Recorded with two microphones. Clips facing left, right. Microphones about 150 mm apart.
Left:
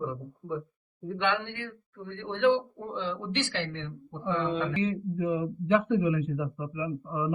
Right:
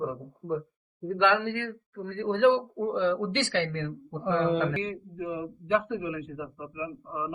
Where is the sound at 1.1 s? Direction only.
75° right (ahead or behind).